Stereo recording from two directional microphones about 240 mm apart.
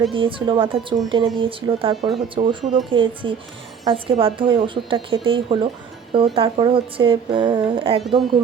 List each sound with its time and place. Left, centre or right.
0.1 s speech: right